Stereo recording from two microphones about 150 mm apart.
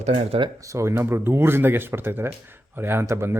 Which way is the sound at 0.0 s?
45° right (ahead or behind).